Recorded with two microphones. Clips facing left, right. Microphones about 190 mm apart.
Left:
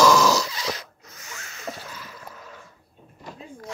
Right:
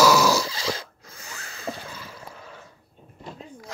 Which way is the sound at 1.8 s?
10° right (ahead or behind).